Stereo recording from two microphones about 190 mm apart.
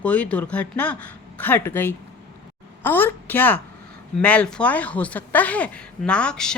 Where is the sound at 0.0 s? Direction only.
5° left (ahead or behind).